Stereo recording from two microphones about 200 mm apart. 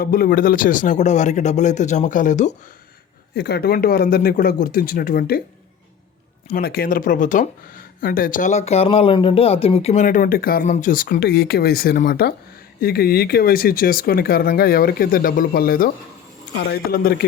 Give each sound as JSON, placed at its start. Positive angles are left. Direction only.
{"t": 0.0, "sound": "speech", "side_deg": 45}
{"t": 3.3, "sound": "speech", "side_deg": 55}
{"t": 6.5, "sound": "speech", "side_deg": 50}